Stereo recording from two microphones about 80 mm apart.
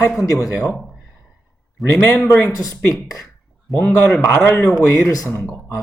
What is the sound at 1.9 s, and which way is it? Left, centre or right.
Speech, left.